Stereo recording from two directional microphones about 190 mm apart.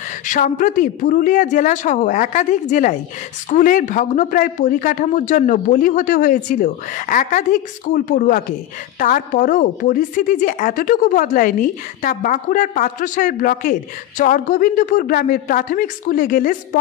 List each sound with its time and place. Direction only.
0.3 s a woman's voice: 45° left (ahead or behind)